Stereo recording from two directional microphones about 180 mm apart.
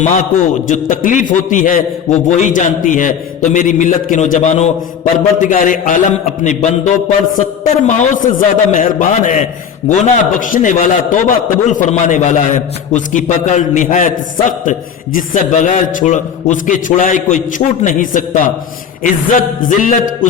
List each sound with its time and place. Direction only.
0.0 s a man's voice: 45° left (ahead or behind)